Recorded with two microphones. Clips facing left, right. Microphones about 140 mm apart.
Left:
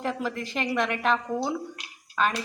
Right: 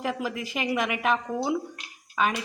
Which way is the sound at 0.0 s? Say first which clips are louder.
Even; 5° right (ahead or behind).